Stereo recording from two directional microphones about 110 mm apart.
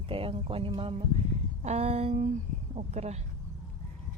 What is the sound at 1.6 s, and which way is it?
Speech, 80° right.